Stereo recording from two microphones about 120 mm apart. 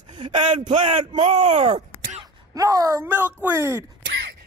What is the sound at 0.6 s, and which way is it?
Speech, 70° right (ahead or behind).